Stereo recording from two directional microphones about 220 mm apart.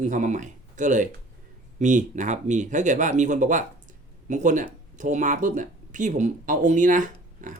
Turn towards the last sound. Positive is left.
turn(degrees=-35)  # may be behind; listen again after turning